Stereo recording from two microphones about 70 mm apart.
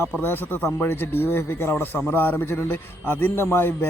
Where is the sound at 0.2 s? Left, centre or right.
Left.